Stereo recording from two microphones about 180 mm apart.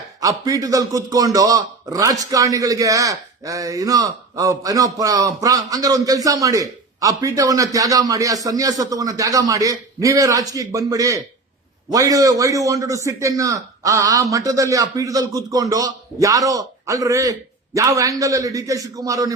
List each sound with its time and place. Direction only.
0.2 s a man's voice: 20° right (ahead or behind)